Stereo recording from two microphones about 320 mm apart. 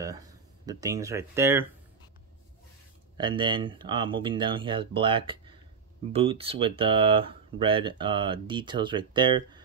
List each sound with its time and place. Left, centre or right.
0.0 s speech: centre
3.2 s speech: centre